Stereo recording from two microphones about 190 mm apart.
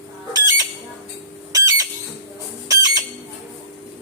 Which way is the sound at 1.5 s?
20° right (ahead or behind).